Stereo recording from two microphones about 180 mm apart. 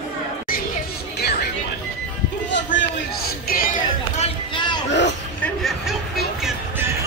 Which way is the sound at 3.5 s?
55° left (ahead or behind).